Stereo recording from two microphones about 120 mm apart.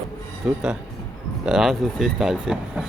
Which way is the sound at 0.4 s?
5° right (ahead or behind).